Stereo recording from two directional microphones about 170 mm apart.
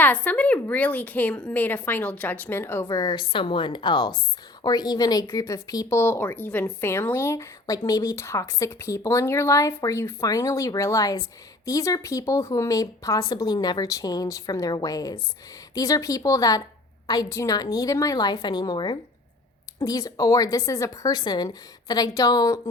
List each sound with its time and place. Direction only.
0.0 s a woman's voice: 10° left (ahead or behind)